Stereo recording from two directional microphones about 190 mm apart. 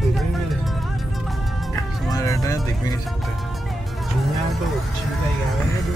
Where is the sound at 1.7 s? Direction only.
20° left (ahead or behind).